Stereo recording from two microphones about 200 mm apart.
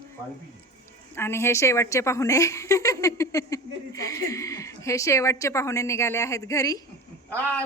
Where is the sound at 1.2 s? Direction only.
15° left (ahead or behind).